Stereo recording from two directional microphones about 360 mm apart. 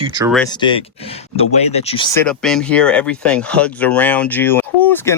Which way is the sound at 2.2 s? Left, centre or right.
Centre.